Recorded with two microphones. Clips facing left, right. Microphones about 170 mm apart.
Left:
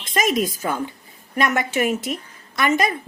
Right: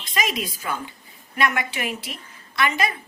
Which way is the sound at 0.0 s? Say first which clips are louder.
Left 6 dB; 45° left (ahead or behind).